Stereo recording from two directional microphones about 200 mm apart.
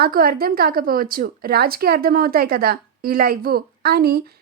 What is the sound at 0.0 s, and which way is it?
A woman's voice, 50° right (ahead or behind).